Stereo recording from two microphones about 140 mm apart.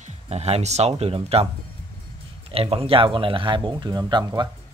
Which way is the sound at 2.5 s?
40° right (ahead or behind).